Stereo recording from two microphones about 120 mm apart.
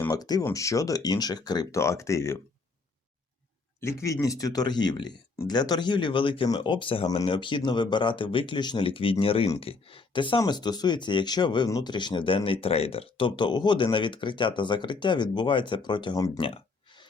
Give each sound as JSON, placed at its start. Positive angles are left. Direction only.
{"t": 0.1, "sound": "speech", "side_deg": 30}
{"t": 3.8, "sound": "speech", "side_deg": 25}
{"t": 16.4, "sound": "speech", "side_deg": 50}